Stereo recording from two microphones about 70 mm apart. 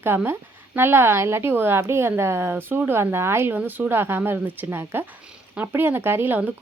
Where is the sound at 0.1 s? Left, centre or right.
Right.